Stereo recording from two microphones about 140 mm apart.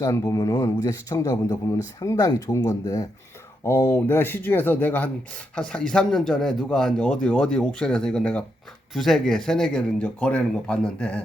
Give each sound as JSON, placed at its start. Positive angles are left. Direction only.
{"t": 0.0, "sound": "a man's voice", "side_deg": 25}